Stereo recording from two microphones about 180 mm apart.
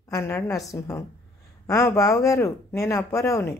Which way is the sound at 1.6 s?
15° left (ahead or behind).